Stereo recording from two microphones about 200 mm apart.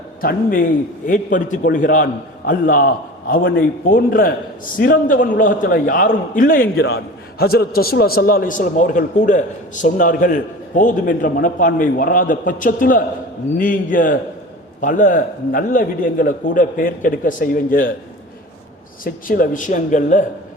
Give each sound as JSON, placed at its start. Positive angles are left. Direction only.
{"t": 0.2, "sound": "a man's voice", "side_deg": 45}
{"t": 19.0, "sound": "a man's voice", "side_deg": 45}